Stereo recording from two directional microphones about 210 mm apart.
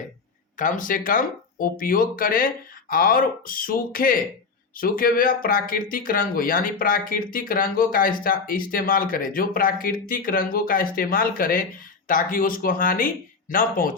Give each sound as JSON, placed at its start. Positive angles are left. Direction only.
{"t": 0.5, "sound": "speech", "side_deg": 40}